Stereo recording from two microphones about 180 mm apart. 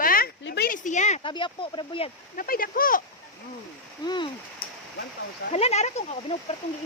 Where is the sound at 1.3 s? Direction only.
25° left (ahead or behind).